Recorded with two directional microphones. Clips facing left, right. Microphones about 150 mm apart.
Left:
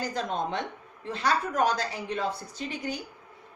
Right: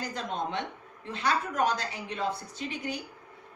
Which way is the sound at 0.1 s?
40° left (ahead or behind).